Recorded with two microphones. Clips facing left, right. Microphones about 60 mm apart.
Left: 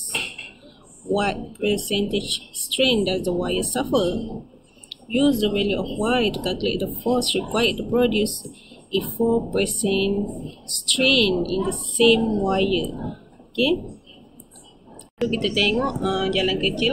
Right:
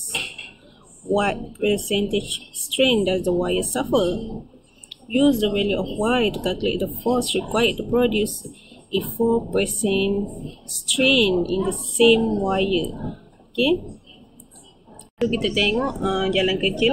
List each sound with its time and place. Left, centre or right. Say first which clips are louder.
0.1 s a sound: left 1 dB; left
1.0 s speech: right 1 dB; centre
15.1 s speech: right 1 dB; centre